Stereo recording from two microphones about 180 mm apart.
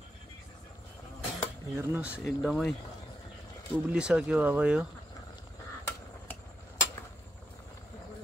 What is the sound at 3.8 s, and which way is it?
Speech, 5° right (ahead or behind).